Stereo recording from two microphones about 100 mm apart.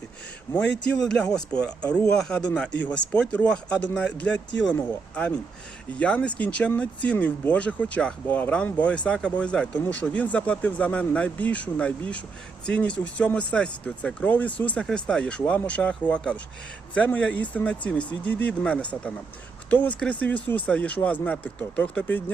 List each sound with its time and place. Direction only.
0.5 s speech: 25° left (ahead or behind)
1.0 s speech: 10° left (ahead or behind)